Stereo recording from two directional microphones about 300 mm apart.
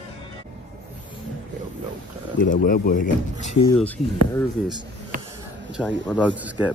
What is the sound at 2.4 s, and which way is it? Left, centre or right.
Speech, left.